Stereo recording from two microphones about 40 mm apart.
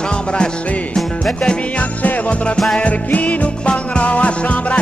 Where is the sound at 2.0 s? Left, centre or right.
Left.